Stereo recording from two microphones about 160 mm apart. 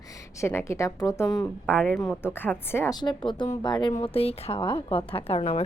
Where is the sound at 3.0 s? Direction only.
30° left (ahead or behind).